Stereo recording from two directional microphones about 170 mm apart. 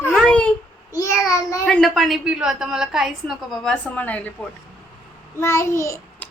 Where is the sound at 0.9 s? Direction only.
20° left (ahead or behind).